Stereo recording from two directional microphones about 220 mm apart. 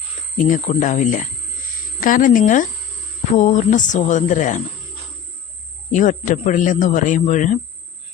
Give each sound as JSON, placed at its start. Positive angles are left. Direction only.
{"t": 0.3, "sound": "a man's voice", "side_deg": 35}
{"t": 5.9, "sound": "a man's voice", "side_deg": 35}